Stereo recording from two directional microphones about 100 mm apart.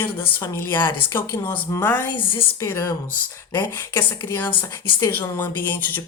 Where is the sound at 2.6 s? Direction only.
30° left (ahead or behind).